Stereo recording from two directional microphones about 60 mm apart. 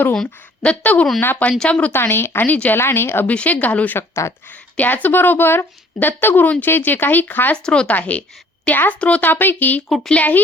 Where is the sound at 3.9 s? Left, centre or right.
Left.